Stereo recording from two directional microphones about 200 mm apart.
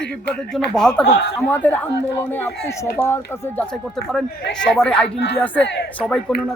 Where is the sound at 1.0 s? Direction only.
55° left (ahead or behind).